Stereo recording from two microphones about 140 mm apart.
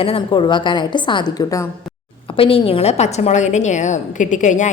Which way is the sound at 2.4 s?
40° left (ahead or behind).